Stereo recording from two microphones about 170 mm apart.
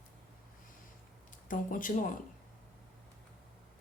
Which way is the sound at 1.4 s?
50° left (ahead or behind).